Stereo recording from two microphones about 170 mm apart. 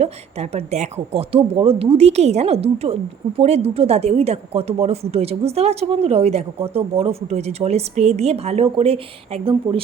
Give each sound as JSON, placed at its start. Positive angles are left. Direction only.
{"t": 0.0, "sound": "speech", "side_deg": -40}